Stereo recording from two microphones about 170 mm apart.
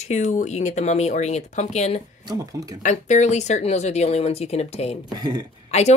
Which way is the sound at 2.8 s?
45° left (ahead or behind).